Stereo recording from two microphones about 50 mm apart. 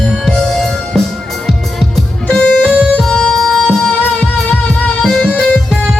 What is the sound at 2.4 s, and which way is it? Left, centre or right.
Music, centre.